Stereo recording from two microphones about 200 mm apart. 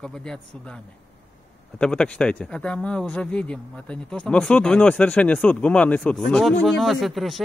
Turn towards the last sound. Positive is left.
turn(degrees=0)  # may be behind; listen again after turning